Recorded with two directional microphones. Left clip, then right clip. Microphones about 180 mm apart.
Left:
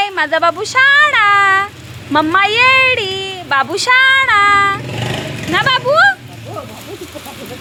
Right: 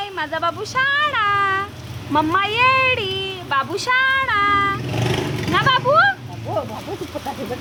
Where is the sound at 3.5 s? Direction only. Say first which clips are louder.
Left 7 dB; 30° left (ahead or behind).